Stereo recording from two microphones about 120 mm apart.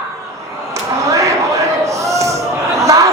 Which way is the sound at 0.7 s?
25° right (ahead or behind).